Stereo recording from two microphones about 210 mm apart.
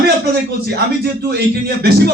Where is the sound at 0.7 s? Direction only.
50° right (ahead or behind).